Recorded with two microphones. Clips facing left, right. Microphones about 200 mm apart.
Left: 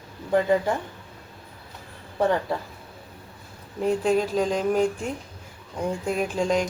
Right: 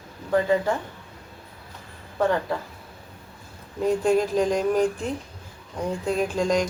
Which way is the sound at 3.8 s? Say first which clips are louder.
Right 1 dB; 5° left (ahead or behind).